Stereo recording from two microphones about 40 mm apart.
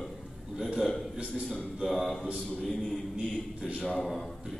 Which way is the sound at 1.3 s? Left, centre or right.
Centre.